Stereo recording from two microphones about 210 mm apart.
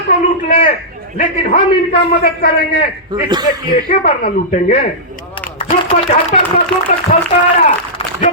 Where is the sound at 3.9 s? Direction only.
40° left (ahead or behind).